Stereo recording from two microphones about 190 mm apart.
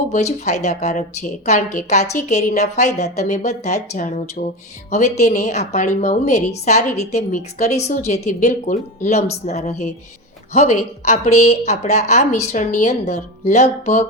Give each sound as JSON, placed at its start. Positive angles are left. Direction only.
{"t": 0.1, "sound": "a woman's voice", "side_deg": 35}